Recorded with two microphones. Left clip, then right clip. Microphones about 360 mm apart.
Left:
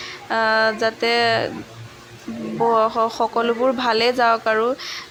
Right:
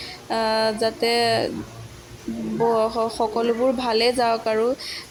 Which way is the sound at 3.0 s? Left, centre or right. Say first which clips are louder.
Left 2 dB; right.